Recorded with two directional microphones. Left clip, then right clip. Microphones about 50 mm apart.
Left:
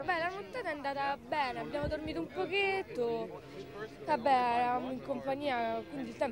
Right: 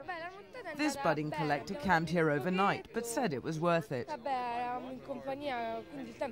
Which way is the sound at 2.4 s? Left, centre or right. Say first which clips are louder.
Even; left.